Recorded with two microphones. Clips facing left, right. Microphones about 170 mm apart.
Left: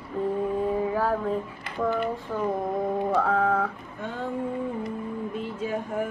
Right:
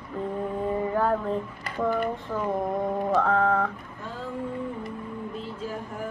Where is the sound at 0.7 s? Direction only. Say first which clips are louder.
Even; 5° left (ahead or behind).